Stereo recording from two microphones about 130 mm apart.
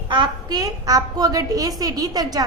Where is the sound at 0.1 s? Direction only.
35° right (ahead or behind).